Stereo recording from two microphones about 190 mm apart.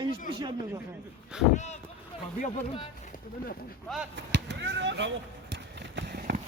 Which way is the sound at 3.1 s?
50° left (ahead or behind).